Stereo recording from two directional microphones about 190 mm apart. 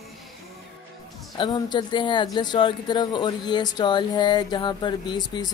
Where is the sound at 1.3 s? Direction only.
25° left (ahead or behind).